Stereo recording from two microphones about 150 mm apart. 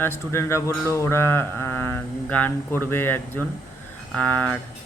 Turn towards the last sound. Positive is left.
turn(degrees=10)  # may be behind; listen again after turning